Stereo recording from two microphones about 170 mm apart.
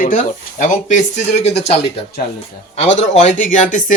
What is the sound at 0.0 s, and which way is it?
Speech, 50° left (ahead or behind).